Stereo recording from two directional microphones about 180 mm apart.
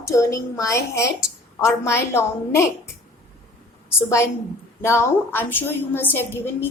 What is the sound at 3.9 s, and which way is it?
A woman's voice, 15° left (ahead or behind).